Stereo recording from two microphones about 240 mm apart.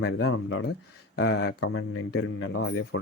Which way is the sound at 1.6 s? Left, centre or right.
Left.